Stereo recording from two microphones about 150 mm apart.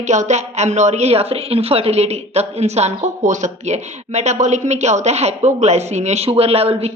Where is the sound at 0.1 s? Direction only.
50° right (ahead or behind).